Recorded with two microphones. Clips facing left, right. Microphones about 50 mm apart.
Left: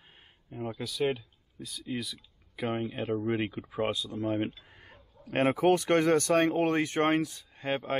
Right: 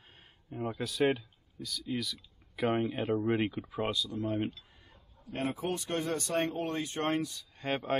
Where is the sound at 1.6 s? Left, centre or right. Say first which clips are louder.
Even; centre.